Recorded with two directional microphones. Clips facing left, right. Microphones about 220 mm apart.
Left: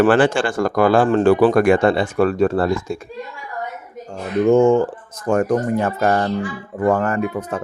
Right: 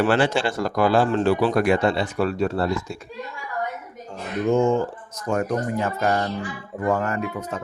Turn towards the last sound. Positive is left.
turn(degrees=50)  # may be behind; listen again after turning